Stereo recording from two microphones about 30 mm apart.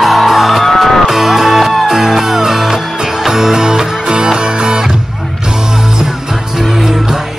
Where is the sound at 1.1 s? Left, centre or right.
Centre.